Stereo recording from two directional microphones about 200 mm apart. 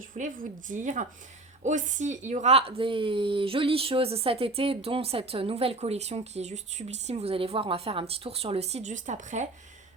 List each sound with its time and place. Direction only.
0.1 s speech: 40° right (ahead or behind)